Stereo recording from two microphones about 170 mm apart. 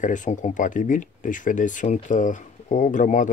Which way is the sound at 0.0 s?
45° left (ahead or behind).